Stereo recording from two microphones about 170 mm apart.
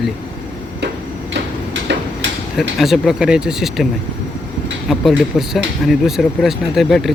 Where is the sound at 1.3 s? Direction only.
90° right.